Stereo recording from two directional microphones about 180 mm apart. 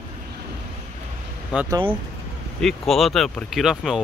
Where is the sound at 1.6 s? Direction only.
25° right (ahead or behind).